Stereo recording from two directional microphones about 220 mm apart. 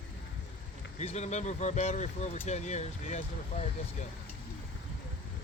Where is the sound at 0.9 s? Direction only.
30° left (ahead or behind).